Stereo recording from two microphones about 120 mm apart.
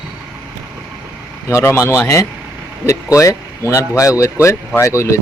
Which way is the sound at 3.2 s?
25° left (ahead or behind).